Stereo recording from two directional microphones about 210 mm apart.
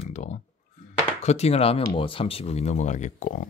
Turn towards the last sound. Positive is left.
turn(degrees=40)  # may be behind; listen again after turning